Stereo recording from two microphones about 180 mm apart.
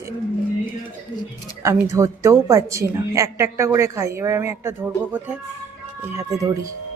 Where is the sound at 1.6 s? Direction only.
15° right (ahead or behind).